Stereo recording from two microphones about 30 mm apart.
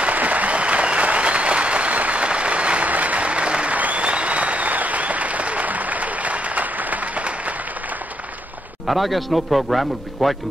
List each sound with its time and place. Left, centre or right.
0.1 s applause: right
2.2 s a sound: right
2.9 s applause: right
3.7 s applause: right
4.0 s applause: right
8.8 s a man's voice: centre